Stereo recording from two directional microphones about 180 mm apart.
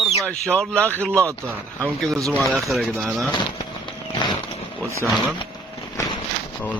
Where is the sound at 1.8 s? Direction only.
Centre (ahead or behind).